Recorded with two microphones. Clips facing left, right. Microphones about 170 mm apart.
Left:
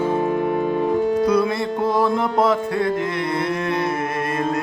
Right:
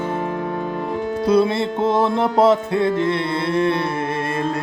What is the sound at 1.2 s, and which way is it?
Music, 30° right (ahead or behind).